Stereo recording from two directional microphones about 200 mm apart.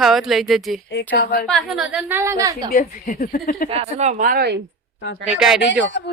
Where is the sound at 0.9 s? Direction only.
55° left (ahead or behind).